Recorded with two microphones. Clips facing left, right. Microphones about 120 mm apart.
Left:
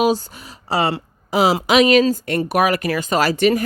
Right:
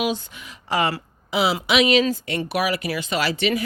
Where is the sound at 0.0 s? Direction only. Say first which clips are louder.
Left 7 dB; 35° left (ahead or behind).